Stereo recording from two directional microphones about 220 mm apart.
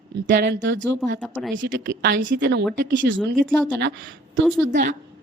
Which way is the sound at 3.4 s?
5° left (ahead or behind).